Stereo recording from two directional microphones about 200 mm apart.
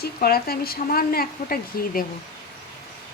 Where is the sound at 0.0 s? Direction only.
50° left (ahead or behind).